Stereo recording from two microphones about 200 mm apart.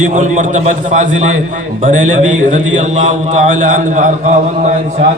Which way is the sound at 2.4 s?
40° right (ahead or behind).